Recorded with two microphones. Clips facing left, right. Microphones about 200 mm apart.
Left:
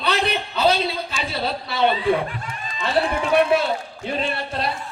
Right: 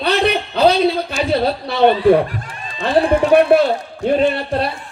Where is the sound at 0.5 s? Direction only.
65° right (ahead or behind).